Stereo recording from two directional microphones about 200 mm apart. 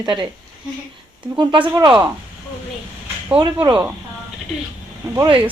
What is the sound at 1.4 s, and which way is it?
Speech, 25° right (ahead or behind).